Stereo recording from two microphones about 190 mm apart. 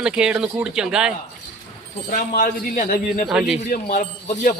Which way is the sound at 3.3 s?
5° right (ahead or behind).